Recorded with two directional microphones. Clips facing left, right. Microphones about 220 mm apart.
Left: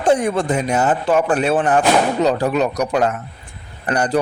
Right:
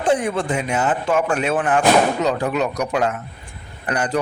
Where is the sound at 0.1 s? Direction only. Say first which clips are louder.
Left 3 dB; 40° left (ahead or behind).